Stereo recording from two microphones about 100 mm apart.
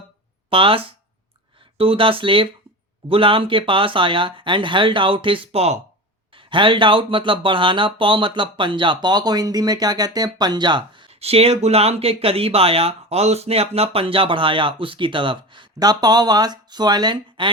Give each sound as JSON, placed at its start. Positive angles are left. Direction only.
{"t": 0.5, "sound": "speech", "side_deg": -65}
{"t": 6.3, "sound": "speech", "side_deg": -55}
{"t": 11.1, "sound": "speech", "side_deg": -90}